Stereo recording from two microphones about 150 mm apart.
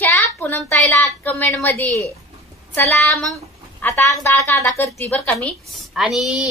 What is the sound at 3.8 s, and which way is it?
A woman's voice, 15° left (ahead or behind).